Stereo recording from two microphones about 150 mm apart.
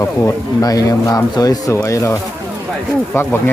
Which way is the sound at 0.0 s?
20° left (ahead or behind).